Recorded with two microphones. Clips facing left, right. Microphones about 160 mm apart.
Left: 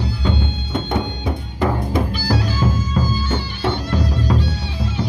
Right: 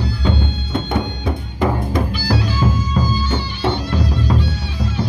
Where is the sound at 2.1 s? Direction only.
45° left (ahead or behind).